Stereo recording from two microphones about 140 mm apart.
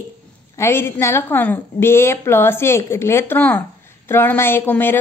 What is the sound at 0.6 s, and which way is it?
A woman's voice, 15° left (ahead or behind).